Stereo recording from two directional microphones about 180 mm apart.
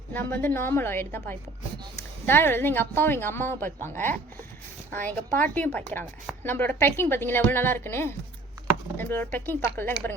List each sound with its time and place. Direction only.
0.1 s speech: 10° left (ahead or behind)
4.9 s speech: 10° left (ahead or behind)